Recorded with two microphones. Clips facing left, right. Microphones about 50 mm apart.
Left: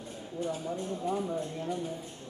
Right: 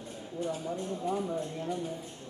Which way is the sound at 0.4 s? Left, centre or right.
Centre.